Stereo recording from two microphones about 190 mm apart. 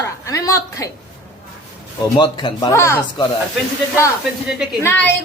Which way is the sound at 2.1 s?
25° left (ahead or behind).